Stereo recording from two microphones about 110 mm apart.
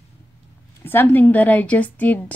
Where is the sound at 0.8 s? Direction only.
20° left (ahead or behind).